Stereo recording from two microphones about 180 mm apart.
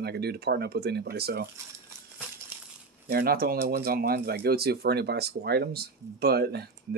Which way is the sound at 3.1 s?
60° right (ahead or behind).